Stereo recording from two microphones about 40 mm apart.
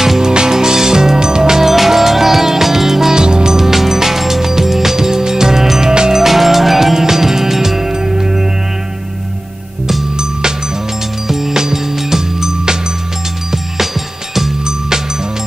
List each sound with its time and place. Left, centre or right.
0.0 s music: centre
6.2 s music: centre
11.2 s music: centre
14.3 s music: centre